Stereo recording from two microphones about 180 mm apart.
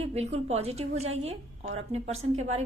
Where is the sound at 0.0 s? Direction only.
35° right (ahead or behind).